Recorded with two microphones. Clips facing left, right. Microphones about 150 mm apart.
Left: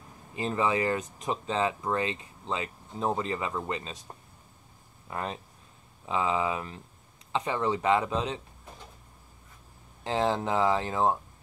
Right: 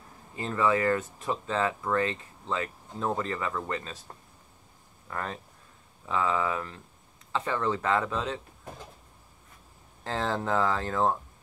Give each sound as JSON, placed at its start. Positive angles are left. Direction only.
{"t": 0.4, "sound": "speech", "side_deg": 20}
{"t": 5.0, "sound": "speech", "side_deg": 20}
{"t": 10.0, "sound": "speech", "side_deg": 15}